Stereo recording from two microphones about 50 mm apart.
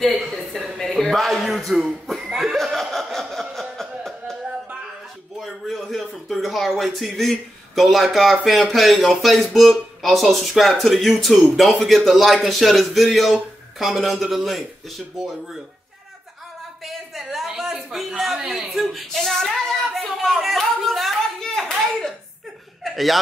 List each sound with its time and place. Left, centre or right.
0.1 s a sound: centre
1.4 s speech: centre
2.5 s chuckle: centre
5.4 s a sound: centre
10.2 s a man's voice: centre
16.8 s a woman's voice: centre
22.8 s a man's voice: centre